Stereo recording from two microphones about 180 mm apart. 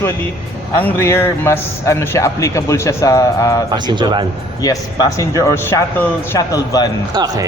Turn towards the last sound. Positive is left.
turn(degrees=-20)  # may be behind; listen again after turning